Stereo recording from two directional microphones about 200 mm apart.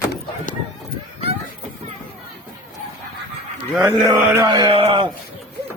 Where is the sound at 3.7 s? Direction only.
10° right (ahead or behind); by 5.0 s 25° right (ahead or behind).